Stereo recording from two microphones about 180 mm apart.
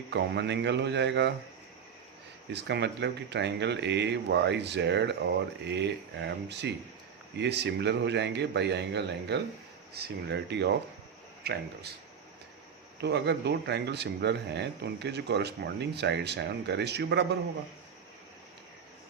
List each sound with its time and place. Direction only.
0.1 s speech: 75° right (ahead or behind)
2.5 s speech: 70° right (ahead or behind)
13.0 s speech: 70° right (ahead or behind)